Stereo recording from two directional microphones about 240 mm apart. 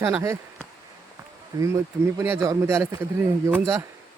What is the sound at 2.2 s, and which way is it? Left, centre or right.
Speech, centre.